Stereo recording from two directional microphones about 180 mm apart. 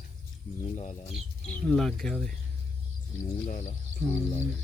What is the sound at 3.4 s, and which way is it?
Speech, 40° left (ahead or behind).